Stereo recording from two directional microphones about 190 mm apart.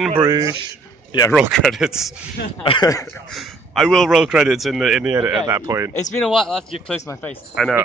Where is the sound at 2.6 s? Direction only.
25° left (ahead or behind).